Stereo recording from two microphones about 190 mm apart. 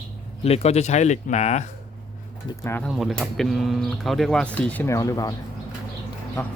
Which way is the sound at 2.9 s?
Centre (ahead or behind).